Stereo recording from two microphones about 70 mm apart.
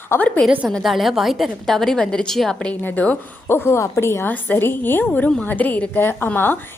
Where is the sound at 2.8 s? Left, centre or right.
Left.